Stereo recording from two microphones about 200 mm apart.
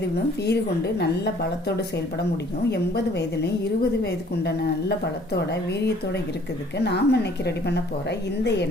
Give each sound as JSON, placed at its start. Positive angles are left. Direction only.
{"t": 0.9, "sound": "a woman's voice", "side_deg": 55}
{"t": 6.7, "sound": "a woman's voice", "side_deg": 55}